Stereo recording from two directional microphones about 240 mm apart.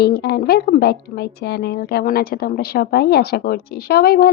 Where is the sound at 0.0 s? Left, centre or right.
Left.